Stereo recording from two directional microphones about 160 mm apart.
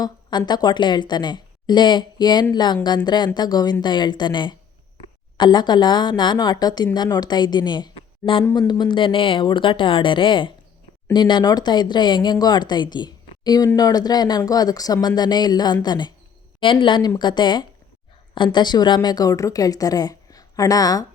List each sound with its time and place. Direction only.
0.0 s a woman's voice: 25° left (ahead or behind)